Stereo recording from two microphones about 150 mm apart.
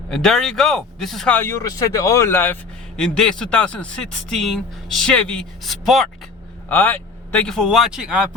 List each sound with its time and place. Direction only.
0.1 s a man's voice: 5° left (ahead or behind)
1.4 s speech: 20° left (ahead or behind)
3.0 s a man's voice: 5° left (ahead or behind)
6.7 s a man's voice: 15° left (ahead or behind); by 8.3 s 5° right (ahead or behind)